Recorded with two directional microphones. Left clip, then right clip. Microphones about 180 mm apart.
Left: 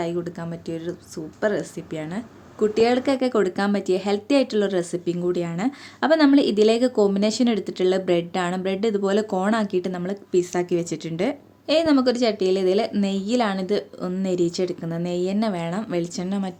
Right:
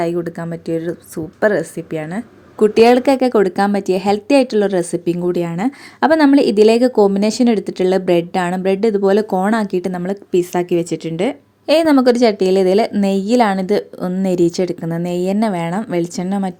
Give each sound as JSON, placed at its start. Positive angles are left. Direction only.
{"t": 0.0, "sound": "a woman's voice", "side_deg": -35}
{"t": 2.6, "sound": "a woman's voice", "side_deg": -45}
{"t": 11.7, "sound": "a woman's voice", "side_deg": -45}